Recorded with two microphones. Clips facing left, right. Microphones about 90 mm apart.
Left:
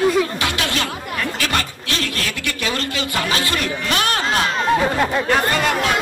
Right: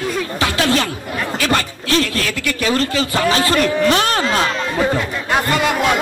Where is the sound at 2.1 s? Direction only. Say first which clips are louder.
Right 4 dB; 35° left (ahead or behind).